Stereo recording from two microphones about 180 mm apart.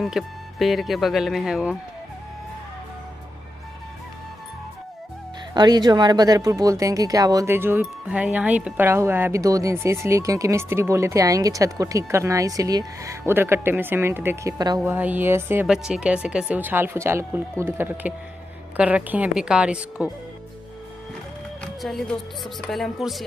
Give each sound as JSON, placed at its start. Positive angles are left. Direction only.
{"t": 0.0, "sound": "speech", "side_deg": 0}
{"t": 5.5, "sound": "speech", "side_deg": -25}
{"t": 21.8, "sound": "speech", "side_deg": 0}